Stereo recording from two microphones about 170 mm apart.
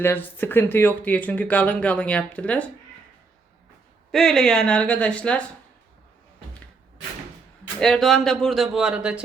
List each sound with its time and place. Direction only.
0.0 s speech: 10° left (ahead or behind)
4.1 s speech: centre (ahead or behind)
7.8 s speech: centre (ahead or behind)